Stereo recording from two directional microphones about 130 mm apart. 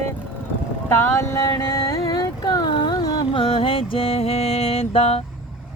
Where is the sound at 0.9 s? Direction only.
20° left (ahead or behind); by 5.2 s 50° left (ahead or behind).